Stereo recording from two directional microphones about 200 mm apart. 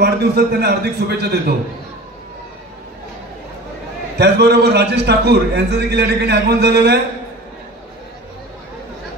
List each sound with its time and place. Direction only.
0.0 s a man's voice: 55° right (ahead or behind)
4.2 s a man's voice: 55° right (ahead or behind)